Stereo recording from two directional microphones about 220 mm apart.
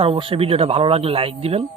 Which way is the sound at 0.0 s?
25° right (ahead or behind).